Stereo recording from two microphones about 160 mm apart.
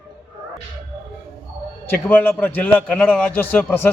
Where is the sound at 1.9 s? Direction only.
10° left (ahead or behind).